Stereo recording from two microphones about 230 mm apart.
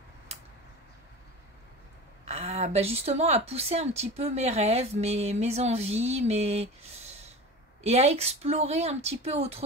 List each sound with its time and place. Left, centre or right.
2.2 s a woman's voice: right
7.8 s a woman's voice: right